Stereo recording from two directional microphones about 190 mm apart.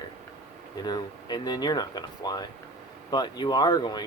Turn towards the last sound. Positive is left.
turn(degrees=20)  # may be behind; listen again after turning